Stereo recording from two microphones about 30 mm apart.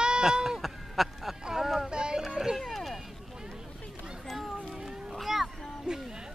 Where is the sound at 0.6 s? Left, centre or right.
Centre.